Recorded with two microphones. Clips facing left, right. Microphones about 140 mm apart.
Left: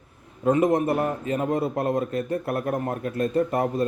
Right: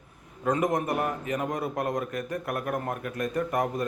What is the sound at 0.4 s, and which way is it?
A man's voice, 25° left (ahead or behind).